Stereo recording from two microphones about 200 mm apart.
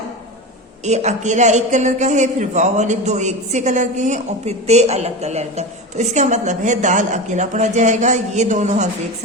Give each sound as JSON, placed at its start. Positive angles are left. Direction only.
{"t": 0.9, "sound": "a man's voice", "side_deg": -35}